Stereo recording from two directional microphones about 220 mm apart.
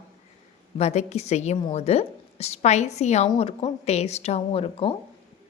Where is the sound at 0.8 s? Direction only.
30° left (ahead or behind).